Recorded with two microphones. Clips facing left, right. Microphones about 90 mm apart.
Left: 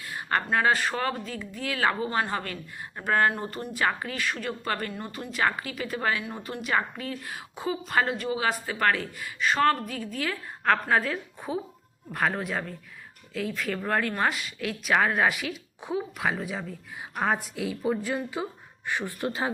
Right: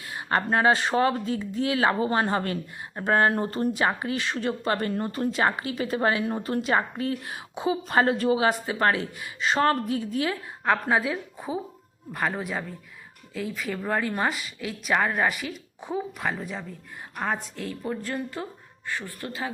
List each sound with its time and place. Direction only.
0.0 s speech: 25° right (ahead or behind)
3.7 s a woman's voice: 20° right (ahead or behind); by 19.5 s 20° left (ahead or behind)